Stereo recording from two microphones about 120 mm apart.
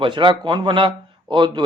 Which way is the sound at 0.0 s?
45° right (ahead or behind).